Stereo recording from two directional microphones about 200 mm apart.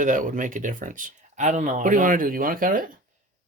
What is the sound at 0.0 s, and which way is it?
Speech, 40° right (ahead or behind).